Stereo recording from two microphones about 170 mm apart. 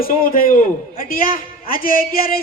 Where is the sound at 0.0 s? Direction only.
60° left (ahead or behind).